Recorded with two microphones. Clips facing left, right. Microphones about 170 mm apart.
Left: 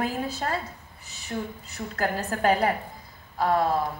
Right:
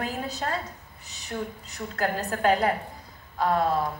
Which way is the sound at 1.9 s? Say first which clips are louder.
Even; 40° left (ahead or behind).